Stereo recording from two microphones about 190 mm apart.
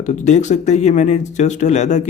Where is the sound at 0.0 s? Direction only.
40° left (ahead or behind).